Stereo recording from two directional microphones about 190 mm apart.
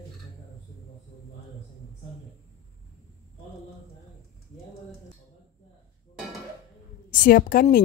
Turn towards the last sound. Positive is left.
turn(degrees=50)  # may be behind; listen again after turning